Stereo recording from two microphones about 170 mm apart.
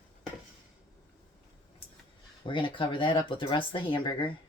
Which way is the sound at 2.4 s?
30° left (ahead or behind).